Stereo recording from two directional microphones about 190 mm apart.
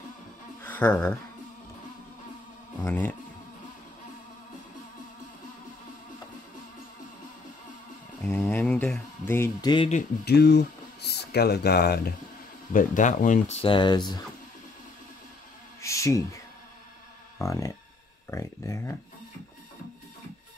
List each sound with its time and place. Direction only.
0.7 s speech: 10° left (ahead or behind)
2.8 s speech: 10° left (ahead or behind)
8.3 s speech: 10° left (ahead or behind)
10.2 s speech: 60° left (ahead or behind)
12.7 s speech: 45° left (ahead or behind); by 14.2 s 20° left (ahead or behind)
15.8 s a sound: 15° left (ahead or behind)
17.4 s speech: 15° left (ahead or behind)